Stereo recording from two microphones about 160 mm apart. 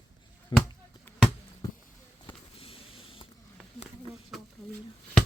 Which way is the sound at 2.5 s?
35° left (ahead or behind).